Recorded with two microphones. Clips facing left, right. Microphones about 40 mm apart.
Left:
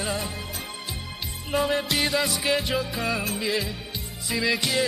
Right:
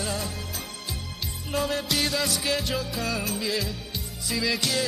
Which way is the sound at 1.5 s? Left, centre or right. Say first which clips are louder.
Left 3 dB; centre.